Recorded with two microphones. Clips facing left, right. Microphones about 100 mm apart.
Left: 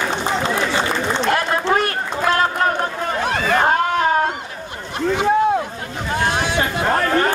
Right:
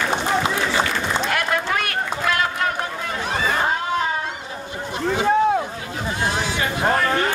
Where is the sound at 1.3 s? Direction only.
30° left (ahead or behind).